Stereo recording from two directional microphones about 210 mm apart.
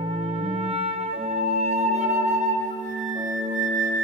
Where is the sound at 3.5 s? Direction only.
35° right (ahead or behind).